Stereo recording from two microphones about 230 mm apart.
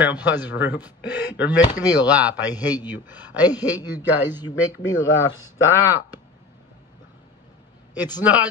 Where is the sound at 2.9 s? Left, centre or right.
Centre.